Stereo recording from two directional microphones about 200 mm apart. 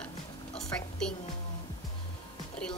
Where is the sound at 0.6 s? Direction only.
5° left (ahead or behind).